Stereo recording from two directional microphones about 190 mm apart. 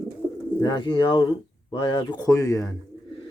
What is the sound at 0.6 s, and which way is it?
Speech, 25° left (ahead or behind).